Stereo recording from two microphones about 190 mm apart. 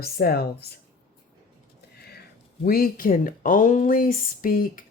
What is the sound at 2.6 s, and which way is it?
A woman's voice, 50° left (ahead or behind).